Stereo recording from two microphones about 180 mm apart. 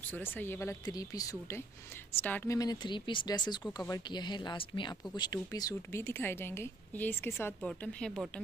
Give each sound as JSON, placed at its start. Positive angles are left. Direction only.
{"t": 0.1, "sound": "a woman's voice", "side_deg": 10}